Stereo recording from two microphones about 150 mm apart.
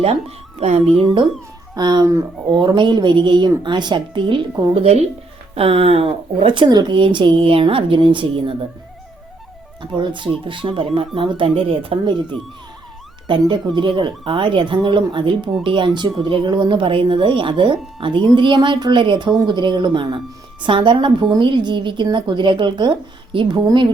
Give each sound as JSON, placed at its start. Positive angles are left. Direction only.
{"t": 0.0, "sound": "speech", "side_deg": -40}
{"t": 1.0, "sound": "a woman's voice", "side_deg": -30}
{"t": 9.8, "sound": "a woman's voice", "side_deg": -30}
{"t": 13.5, "sound": "a woman's voice", "side_deg": -30}